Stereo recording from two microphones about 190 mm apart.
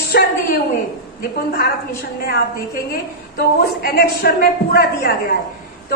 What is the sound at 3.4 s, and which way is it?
A man's voice, 55° left (ahead or behind).